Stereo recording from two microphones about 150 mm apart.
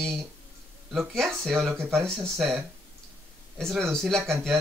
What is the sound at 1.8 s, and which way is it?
Speech, 15° right (ahead or behind).